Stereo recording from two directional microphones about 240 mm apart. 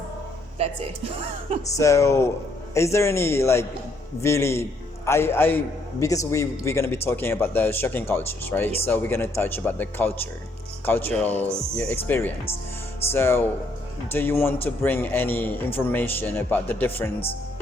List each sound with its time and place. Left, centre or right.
0.6 s a woman's voice: right
1.7 s speech: centre